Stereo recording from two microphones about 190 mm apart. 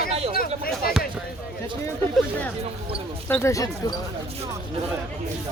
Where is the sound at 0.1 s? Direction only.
30° right (ahead or behind).